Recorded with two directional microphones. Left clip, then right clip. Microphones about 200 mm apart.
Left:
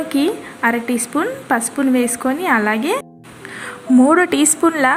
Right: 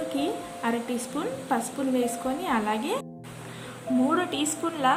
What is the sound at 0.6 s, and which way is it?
A woman's voice, 15° left (ahead or behind).